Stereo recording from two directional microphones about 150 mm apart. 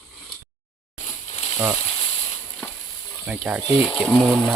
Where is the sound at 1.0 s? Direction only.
50° left (ahead or behind).